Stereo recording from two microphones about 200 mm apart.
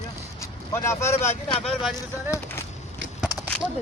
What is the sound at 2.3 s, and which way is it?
Speech, 10° left (ahead or behind).